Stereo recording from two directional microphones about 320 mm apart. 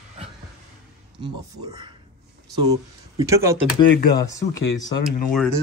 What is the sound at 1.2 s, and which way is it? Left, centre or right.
Speech, centre.